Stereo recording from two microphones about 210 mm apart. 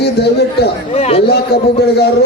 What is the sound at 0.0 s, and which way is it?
Speech, 50° left (ahead or behind).